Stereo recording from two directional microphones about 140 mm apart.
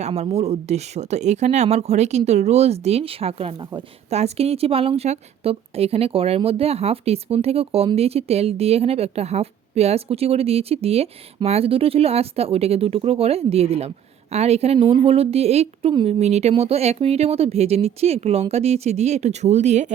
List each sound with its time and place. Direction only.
0.0 s a woman's voice: 50° right (ahead or behind)